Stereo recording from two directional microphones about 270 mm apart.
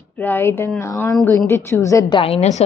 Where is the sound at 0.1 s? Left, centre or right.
Centre.